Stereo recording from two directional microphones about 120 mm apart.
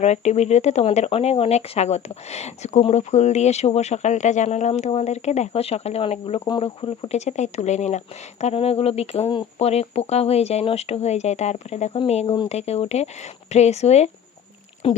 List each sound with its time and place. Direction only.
0.0 s a woman's voice: 70° left (ahead or behind); by 7.2 s 50° left (ahead or behind)
7.2 s a woman's voice: 70° left (ahead or behind)
14.8 s speech: 50° left (ahead or behind)